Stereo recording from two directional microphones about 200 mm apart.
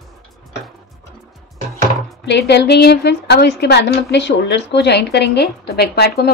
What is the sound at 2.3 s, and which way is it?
A woman's voice, 60° left (ahead or behind).